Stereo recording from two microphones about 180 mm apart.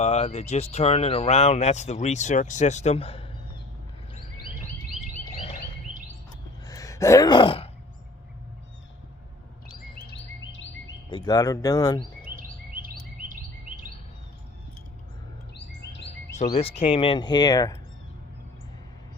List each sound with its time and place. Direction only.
0.0 s speech: 35° left (ahead or behind)
5.4 s a sound: 35° left (ahead or behind)
6.7 s gasp: 20° left (ahead or behind)
10.1 s bird: 90° left
11.1 s speech: 20° left (ahead or behind)
12.4 s chirp: 55° right (ahead or behind)
16.6 s speech: 35° left (ahead or behind)